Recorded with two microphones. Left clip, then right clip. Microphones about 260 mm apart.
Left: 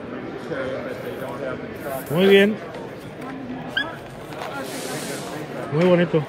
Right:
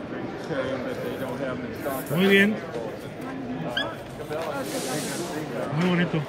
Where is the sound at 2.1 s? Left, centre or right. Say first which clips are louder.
Left 5 dB; centre.